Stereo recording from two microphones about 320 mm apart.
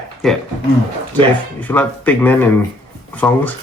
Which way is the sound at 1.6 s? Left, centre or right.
Centre.